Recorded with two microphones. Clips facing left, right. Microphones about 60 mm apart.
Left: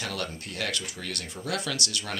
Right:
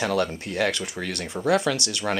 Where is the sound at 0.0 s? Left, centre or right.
Right.